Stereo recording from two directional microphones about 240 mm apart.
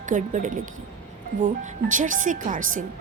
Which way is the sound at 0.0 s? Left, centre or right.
Right.